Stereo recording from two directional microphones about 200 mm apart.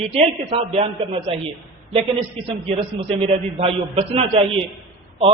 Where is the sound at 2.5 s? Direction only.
30° right (ahead or behind).